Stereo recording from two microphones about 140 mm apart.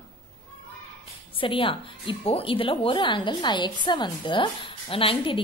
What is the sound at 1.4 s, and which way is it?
A woman's voice, 40° left (ahead or behind).